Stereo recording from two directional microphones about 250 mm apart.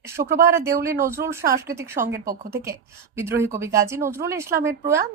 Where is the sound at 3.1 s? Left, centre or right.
Centre.